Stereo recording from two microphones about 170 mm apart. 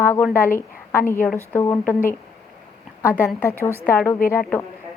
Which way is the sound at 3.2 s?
15° left (ahead or behind).